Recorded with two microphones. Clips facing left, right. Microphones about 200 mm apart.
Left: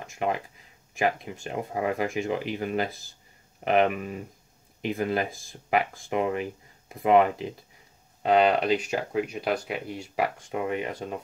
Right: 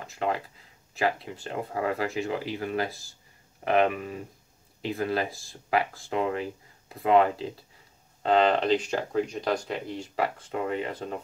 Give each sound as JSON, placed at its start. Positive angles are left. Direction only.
{"t": 0.1, "sound": "speech", "side_deg": 15}